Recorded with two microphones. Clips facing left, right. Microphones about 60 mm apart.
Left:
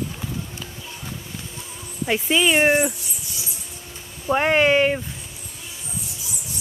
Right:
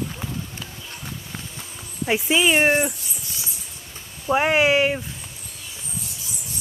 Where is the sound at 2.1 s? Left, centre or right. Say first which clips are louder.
Even; centre.